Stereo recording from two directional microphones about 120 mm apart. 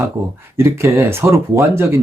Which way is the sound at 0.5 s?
20° right (ahead or behind).